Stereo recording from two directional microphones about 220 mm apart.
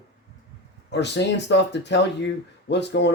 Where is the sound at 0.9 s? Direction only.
50° left (ahead or behind).